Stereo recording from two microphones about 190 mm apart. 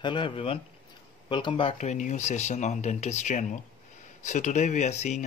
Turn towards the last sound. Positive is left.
turn(degrees=35)  # may be behind; listen again after turning